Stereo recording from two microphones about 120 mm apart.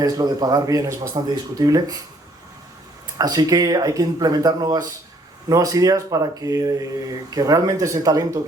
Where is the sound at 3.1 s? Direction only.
30° right (ahead or behind).